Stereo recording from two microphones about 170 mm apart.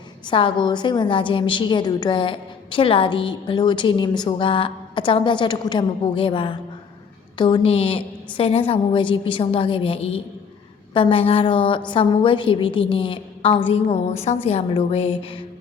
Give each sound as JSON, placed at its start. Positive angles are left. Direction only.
{"t": 0.3, "sound": "a woman's voice", "side_deg": 30}